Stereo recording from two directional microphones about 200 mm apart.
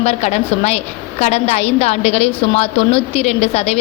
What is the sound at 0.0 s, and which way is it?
A woman's voice, 30° left (ahead or behind).